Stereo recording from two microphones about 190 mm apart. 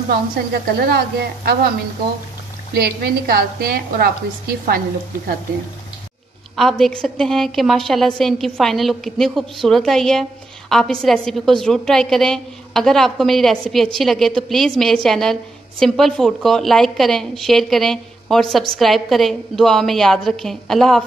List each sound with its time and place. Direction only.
0.5 s speech: 55° right (ahead or behind)
2.7 s a woman's voice: 55° right (ahead or behind)
6.5 s a woman's voice: centre (ahead or behind)